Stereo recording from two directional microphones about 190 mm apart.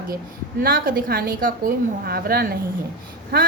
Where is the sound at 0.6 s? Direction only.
50° right (ahead or behind).